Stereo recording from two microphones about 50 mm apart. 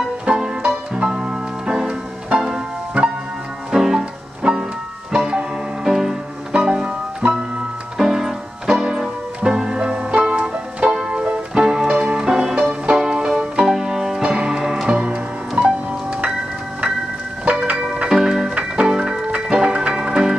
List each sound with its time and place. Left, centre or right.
0.2 s music: centre
3.7 s music: centre
14.9 s music: right
18.0 s music: centre